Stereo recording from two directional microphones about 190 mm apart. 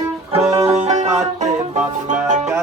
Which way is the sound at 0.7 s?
35° right (ahead or behind).